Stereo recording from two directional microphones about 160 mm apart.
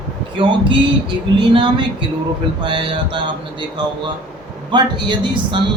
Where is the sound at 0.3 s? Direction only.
30° right (ahead or behind).